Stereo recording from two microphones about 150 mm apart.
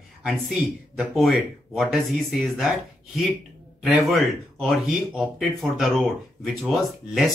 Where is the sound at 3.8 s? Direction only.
Centre (ahead or behind).